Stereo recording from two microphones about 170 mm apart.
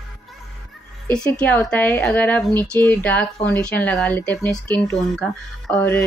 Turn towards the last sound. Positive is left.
turn(degrees=10)  # may be behind; listen again after turning